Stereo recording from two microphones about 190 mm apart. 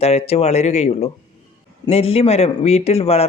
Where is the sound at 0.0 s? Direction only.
35° left (ahead or behind).